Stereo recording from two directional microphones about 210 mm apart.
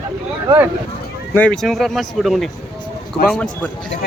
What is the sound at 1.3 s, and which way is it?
Speech, 5° left (ahead or behind).